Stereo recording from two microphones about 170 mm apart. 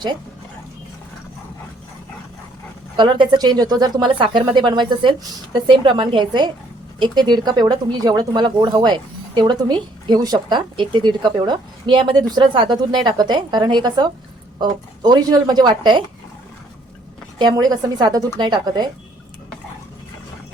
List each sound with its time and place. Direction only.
2.9 s speech: 25° right (ahead or behind)
17.3 s speech: 25° right (ahead or behind)